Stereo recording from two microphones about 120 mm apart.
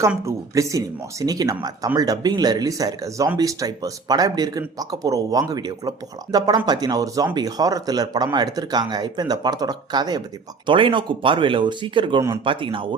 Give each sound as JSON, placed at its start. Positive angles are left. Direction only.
{"t": 0.3, "sound": "speech", "side_deg": -25}